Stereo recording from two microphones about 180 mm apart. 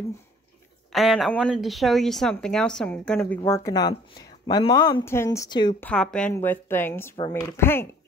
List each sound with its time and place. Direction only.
0.9 s speech: centre (ahead or behind)
3.4 s speech: 15° left (ahead or behind)
5.8 s a woman's voice: 5° left (ahead or behind)
7.2 s speech: 25° left (ahead or behind)
7.6 s a woman's voice: 10° left (ahead or behind)